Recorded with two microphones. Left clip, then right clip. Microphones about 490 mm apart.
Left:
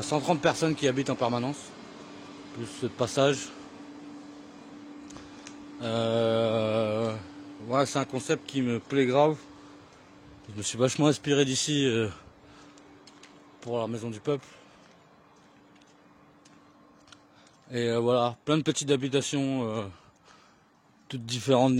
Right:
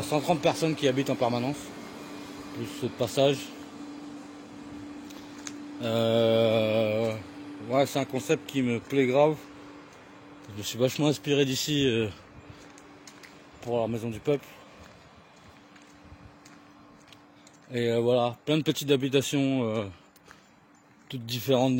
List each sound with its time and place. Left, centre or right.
0.1 s speech: left
1.6 s a sound: left
2.6 s speech: left
5.0 s mantra: left
7.7 s speech: left
10.5 s speech: left
13.0 s a sound: left
17.6 s speech: left
21.1 s speech: left